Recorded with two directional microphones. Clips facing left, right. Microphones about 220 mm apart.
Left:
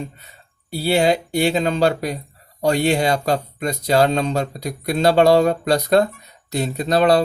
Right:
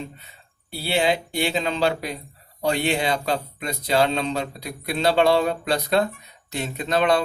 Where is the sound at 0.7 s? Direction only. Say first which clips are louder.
Left 5 dB; 40° left (ahead or behind).